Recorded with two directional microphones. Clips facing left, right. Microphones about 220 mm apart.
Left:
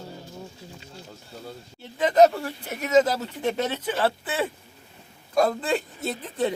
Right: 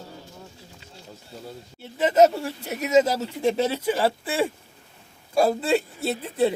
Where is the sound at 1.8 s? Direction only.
5° right (ahead or behind).